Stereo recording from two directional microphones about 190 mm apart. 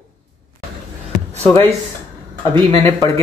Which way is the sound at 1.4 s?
10° left (ahead or behind).